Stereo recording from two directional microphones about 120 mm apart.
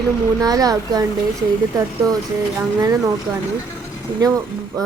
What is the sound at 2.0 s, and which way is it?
Speech, 30° right (ahead or behind).